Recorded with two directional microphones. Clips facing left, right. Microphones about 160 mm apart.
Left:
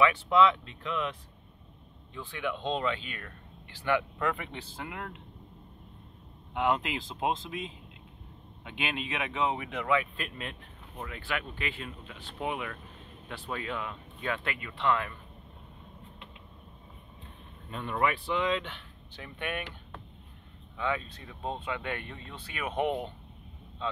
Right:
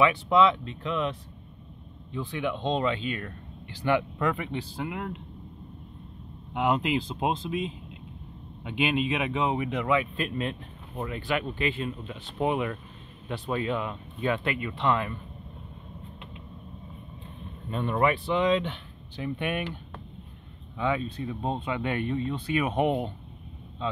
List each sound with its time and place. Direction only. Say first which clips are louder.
0.0 s speech: right 2 dB; 20° right (ahead or behind)
2.1 s speech: right 5 dB; 20° right (ahead or behind)
6.5 s speech: right 4 dB; 15° right (ahead or behind)
17.6 s speech: right 5 dB; 30° right (ahead or behind)
20.7 s speech: right 5 dB; 20° right (ahead or behind)